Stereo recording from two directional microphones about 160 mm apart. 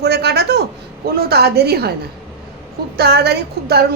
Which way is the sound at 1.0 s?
75° right (ahead or behind).